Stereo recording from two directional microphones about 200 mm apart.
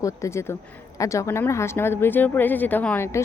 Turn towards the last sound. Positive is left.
turn(degrees=10)  # may be behind; listen again after turning